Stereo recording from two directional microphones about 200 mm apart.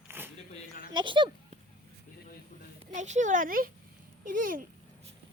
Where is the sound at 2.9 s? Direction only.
35° right (ahead or behind).